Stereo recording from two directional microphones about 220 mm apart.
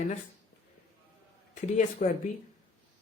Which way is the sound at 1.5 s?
35° left (ahead or behind).